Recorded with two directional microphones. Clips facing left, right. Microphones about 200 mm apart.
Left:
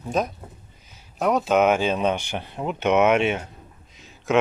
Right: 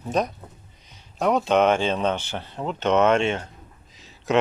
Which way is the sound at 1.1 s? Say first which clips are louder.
Even; centre (ahead or behind).